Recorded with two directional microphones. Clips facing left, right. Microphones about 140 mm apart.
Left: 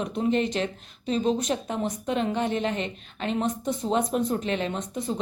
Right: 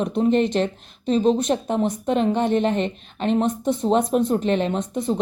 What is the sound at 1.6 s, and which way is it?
A woman's voice, 30° right (ahead or behind).